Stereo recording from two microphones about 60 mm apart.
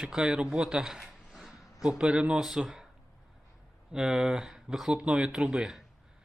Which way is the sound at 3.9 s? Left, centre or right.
Centre.